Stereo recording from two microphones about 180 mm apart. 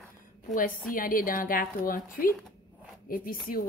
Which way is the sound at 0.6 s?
50° left (ahead or behind).